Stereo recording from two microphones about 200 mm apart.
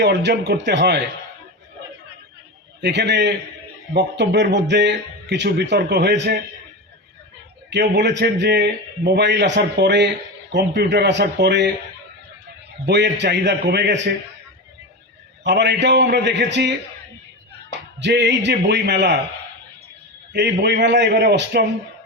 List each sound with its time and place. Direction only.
0.0 s a man's voice: 60° right (ahead or behind)
2.8 s a man's voice: 55° right (ahead or behind)
7.7 s a man's voice: 55° right (ahead or behind)
12.8 s a man's voice: 60° right (ahead or behind)
15.4 s a man's voice: 60° right (ahead or behind)
18.0 s a man's voice: 60° right (ahead or behind)
20.3 s a man's voice: 60° right (ahead or behind)